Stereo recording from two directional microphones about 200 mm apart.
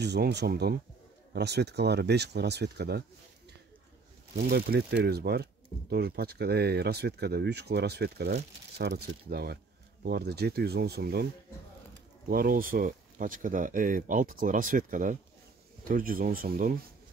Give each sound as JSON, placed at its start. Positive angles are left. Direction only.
{"t": 0.0, "sound": "speech", "side_deg": -55}
{"t": 4.5, "sound": "speech", "side_deg": -55}
{"t": 12.3, "sound": "speech", "side_deg": -45}